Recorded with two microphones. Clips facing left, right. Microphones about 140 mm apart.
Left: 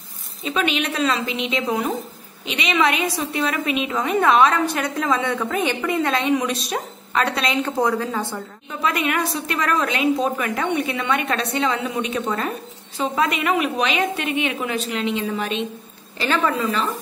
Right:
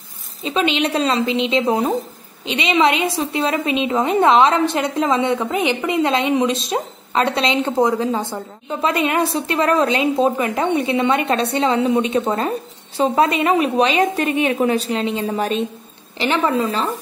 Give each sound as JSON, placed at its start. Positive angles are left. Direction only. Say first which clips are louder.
{"t": 0.4, "sound": "a woman's voice", "louder": "right 4 dB", "side_deg": -25}
{"t": 16.2, "sound": "a woman's voice", "louder": "right 3 dB", "side_deg": -25}